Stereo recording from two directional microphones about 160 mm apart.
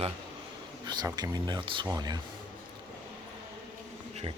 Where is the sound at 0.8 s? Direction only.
25° right (ahead or behind).